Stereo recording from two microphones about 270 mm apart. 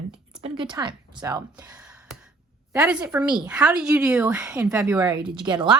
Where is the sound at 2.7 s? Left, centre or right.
Centre.